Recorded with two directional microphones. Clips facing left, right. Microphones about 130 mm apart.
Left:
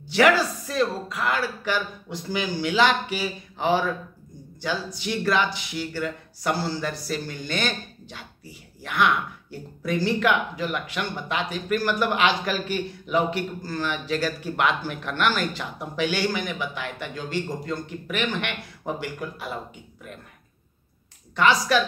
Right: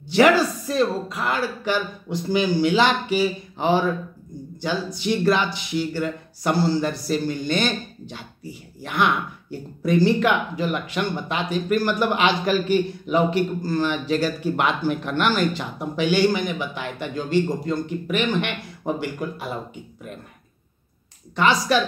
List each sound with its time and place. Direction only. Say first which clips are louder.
0.1 s speech: right 3 dB; 25° right (ahead or behind)
21.4 s speech: right 1 dB; 25° right (ahead or behind)